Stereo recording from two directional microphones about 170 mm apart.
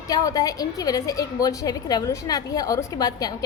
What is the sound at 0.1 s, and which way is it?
A woman's voice, 20° left (ahead or behind).